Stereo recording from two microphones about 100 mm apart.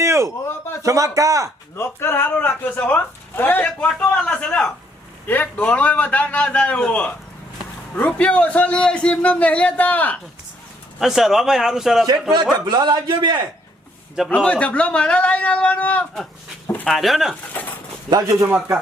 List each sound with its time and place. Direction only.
0.0 s a sound: 30° right (ahead or behind)
0.8 s speech: 35° right (ahead or behind)
1.7 s a man's voice: 25° left (ahead or behind)
11.0 s a man's voice: 5° right (ahead or behind)
12.6 s a man's voice: 45° right (ahead or behind)
14.3 s a man's voice: 15° left (ahead or behind)
16.8 s a man's voice: centre (ahead or behind)
17.5 s a man's voice: 20° left (ahead or behind)
18.1 s speech: 35° right (ahead or behind)